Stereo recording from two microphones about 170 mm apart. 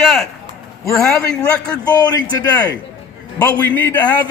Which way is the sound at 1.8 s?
20° left (ahead or behind).